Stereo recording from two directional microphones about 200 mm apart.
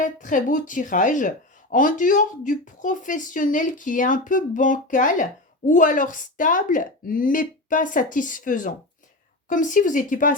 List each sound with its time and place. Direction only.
0.0 s speech: 40° left (ahead or behind)